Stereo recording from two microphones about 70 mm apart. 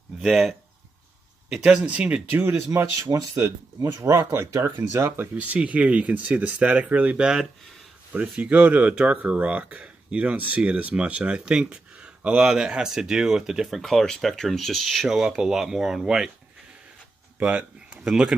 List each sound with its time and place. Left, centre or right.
1.5 s speech: centre
2.4 s speech: right
3.8 s speech: right
4.2 s speech: right; by 16.3 s centre
17.4 s speech: centre